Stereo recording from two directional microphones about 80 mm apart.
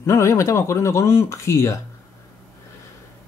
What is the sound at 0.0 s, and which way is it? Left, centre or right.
Mantra, left.